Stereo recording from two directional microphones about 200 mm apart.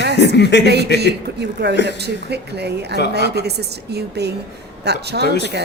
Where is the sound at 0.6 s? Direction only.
55° right (ahead or behind).